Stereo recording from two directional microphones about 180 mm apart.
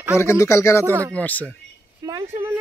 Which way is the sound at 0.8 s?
15° right (ahead or behind).